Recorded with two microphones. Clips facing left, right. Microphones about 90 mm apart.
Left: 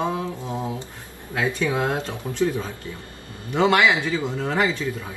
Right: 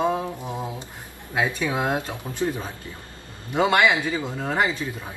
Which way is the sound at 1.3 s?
20° right (ahead or behind).